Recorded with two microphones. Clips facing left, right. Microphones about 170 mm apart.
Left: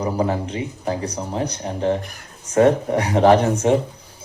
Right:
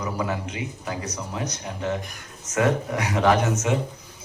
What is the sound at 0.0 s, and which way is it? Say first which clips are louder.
Speech: left 6 dB; 30° left (ahead or behind).